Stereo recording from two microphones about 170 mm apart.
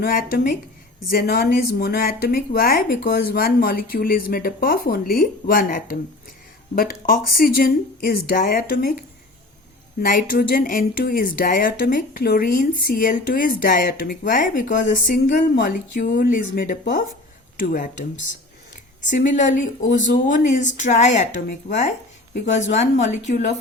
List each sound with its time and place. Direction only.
0.0 s speech: 60° left (ahead or behind)
19.0 s speech: 45° left (ahead or behind)